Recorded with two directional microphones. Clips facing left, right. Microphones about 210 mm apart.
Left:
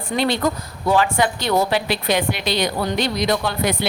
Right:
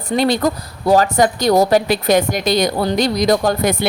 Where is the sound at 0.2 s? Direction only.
40° right (ahead or behind).